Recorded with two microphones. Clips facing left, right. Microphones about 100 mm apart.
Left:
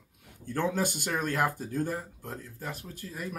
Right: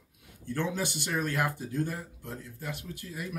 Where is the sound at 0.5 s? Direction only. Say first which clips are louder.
Left 3 dB; 45° left (ahead or behind).